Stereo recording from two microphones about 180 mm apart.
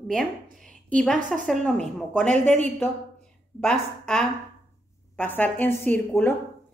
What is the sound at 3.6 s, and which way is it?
A woman's voice, 5° left (ahead or behind).